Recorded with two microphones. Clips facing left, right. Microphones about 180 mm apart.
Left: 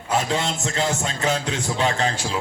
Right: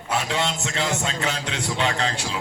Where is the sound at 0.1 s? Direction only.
40° left (ahead or behind).